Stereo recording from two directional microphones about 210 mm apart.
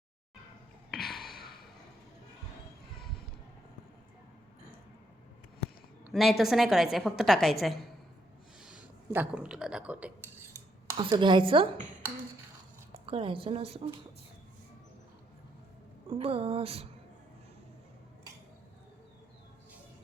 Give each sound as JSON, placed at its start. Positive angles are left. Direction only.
{"t": 0.9, "sound": "gasp", "side_deg": 0}
{"t": 6.1, "sound": "a woman's voice", "side_deg": 0}
{"t": 8.6, "sound": "speech", "side_deg": -5}
{"t": 10.8, "sound": "speech", "side_deg": -20}
{"t": 12.9, "sound": "speech", "side_deg": -25}
{"t": 16.0, "sound": "speech", "side_deg": -25}